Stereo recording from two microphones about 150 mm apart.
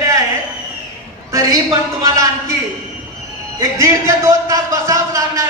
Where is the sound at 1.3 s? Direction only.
20° right (ahead or behind).